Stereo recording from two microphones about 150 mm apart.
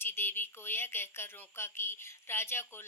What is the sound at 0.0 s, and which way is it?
A woman's voice, 15° left (ahead or behind).